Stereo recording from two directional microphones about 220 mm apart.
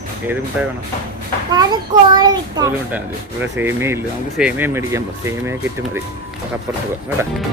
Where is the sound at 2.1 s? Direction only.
20° right (ahead or behind).